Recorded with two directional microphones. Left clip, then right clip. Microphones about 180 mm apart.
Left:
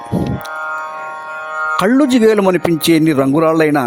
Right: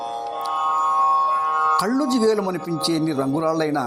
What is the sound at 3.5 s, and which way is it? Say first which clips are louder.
Speech: left 9 dB; 90° left.